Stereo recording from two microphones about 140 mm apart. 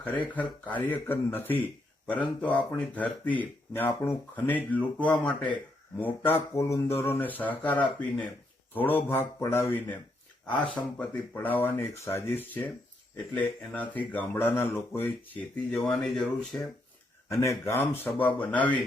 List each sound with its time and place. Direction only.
0.3 s speech: 10° left (ahead or behind)
17.4 s speech: 20° left (ahead or behind)